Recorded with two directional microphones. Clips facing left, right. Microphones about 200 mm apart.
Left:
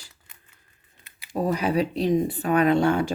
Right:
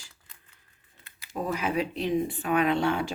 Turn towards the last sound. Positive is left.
turn(degrees=45)  # may be behind; listen again after turning